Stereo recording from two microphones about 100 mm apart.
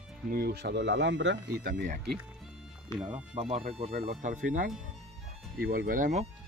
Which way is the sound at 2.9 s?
10° right (ahead or behind).